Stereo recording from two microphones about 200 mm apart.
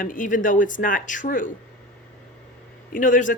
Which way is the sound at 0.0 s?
40° left (ahead or behind).